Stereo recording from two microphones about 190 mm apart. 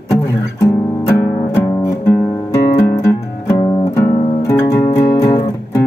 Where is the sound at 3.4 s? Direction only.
15° left (ahead or behind).